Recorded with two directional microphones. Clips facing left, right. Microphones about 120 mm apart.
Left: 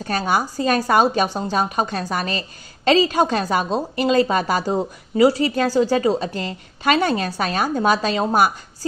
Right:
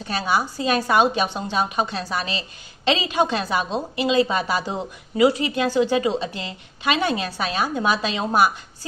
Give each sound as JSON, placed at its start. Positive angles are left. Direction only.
{"t": 0.1, "sound": "a woman's voice", "side_deg": 45}